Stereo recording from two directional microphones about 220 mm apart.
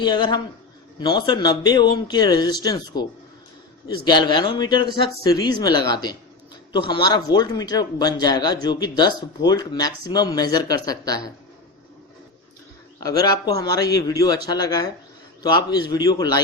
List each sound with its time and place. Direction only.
0.0 s speech: 20° left (ahead or behind)
13.0 s speech: 15° left (ahead or behind)